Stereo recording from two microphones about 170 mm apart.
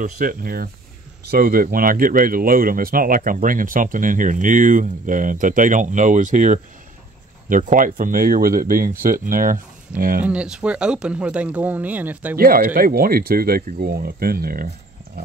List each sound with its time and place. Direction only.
0.0 s speech: 55° right (ahead or behind)
10.2 s speech: 5° right (ahead or behind)
12.4 s speech: 60° right (ahead or behind)